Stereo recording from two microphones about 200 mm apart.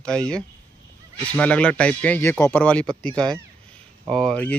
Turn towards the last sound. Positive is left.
turn(degrees=5)  # may be behind; listen again after turning